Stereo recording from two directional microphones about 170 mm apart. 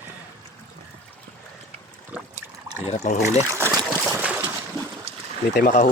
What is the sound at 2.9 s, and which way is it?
Speech, 45° left (ahead or behind).